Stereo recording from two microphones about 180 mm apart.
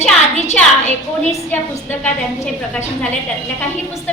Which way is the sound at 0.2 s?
40° left (ahead or behind).